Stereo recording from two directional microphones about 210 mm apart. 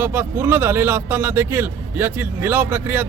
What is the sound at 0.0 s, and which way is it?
Speech, 10° right (ahead or behind).